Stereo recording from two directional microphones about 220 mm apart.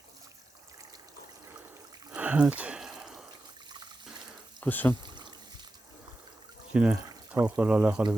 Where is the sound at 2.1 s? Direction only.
5° right (ahead or behind).